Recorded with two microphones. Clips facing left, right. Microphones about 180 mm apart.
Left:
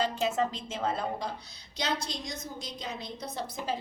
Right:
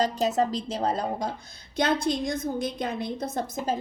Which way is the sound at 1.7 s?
55° right (ahead or behind).